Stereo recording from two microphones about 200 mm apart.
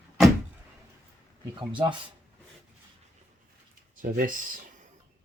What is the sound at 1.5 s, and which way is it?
Speech, 25° right (ahead or behind).